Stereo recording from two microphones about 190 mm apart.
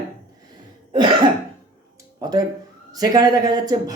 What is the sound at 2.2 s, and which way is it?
Speech, 20° right (ahead or behind).